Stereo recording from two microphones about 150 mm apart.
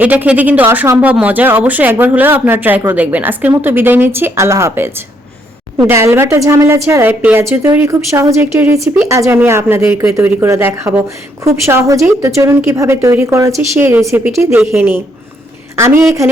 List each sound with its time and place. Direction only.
0.0 s a woman's voice: 10° right (ahead or behind)